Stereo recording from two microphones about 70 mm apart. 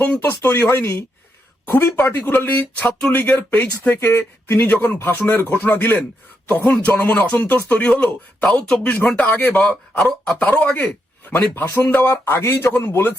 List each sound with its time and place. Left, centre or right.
0.2 s speech: left; by 8.8 s centre
8.8 s speech: left
10.0 s speech: centre
10.3 s a man's voice: left